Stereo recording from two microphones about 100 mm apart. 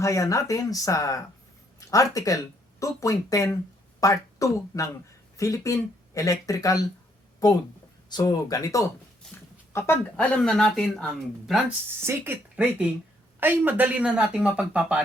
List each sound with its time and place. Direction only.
0.0 s speech: 30° left (ahead or behind)
9.2 s speech: 5° left (ahead or behind)
9.7 s speech: 25° left (ahead or behind)
10.2 s speech: 10° left (ahead or behind)
12.5 s speech: 15° right (ahead or behind)